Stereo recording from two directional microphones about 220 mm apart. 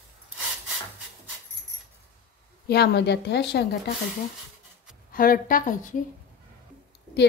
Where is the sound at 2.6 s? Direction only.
45° left (ahead or behind).